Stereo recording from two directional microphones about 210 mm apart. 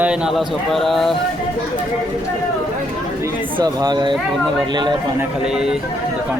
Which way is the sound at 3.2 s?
15° right (ahead or behind).